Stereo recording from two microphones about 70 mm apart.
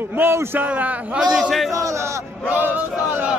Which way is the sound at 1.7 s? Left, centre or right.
Right.